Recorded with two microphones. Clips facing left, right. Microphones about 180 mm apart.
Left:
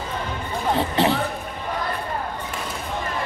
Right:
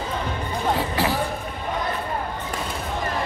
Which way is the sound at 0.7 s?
25° left (ahead or behind).